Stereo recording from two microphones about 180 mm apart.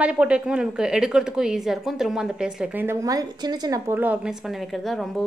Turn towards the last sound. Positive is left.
turn(degrees=0)  # may be behind; listen again after turning